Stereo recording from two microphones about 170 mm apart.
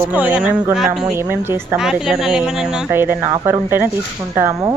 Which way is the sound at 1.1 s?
15° right (ahead or behind).